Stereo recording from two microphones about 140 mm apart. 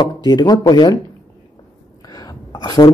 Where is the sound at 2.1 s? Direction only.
30° left (ahead or behind).